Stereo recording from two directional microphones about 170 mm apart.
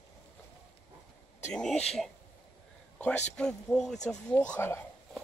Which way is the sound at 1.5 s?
5° left (ahead or behind).